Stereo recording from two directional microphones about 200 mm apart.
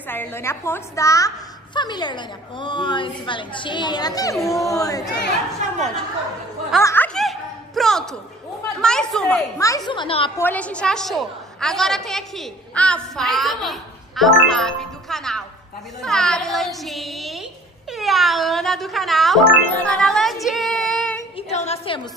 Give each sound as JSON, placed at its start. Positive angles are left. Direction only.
{"t": 0.1, "sound": "a woman's voice", "side_deg": 10}
{"t": 5.6, "sound": "speech", "side_deg": -35}
{"t": 6.8, "sound": "speech", "side_deg": 15}
{"t": 7.2, "sound": "a sound", "side_deg": 0}
{"t": 9.6, "sound": "a woman's voice", "side_deg": 15}
{"t": 10.3, "sound": "a woman's voice", "side_deg": 10}
{"t": 21.4, "sound": "a sound", "side_deg": 35}